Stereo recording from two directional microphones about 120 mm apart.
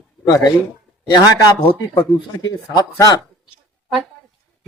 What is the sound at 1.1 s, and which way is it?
Speech, 35° left (ahead or behind).